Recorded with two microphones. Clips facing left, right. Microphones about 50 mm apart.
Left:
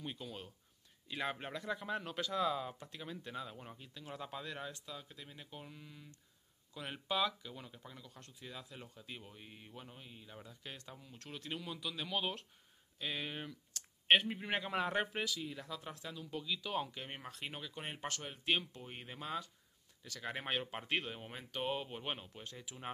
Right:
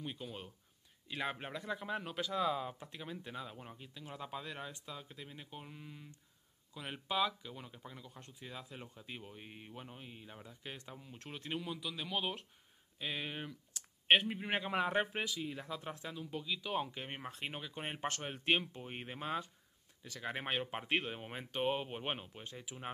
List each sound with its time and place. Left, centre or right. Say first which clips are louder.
0.2 s speech: right 1 dB; centre
4.7 s speech: right 1 dB; centre
6.7 s speech: even; centre; by 11.6 s right
11.6 s speech: right 1 dB; centre; by 19.5 s right
20.0 s speech: right 1 dB; centre